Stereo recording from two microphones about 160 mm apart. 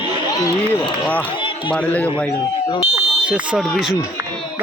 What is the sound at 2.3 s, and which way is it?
Speech, 25° left (ahead or behind).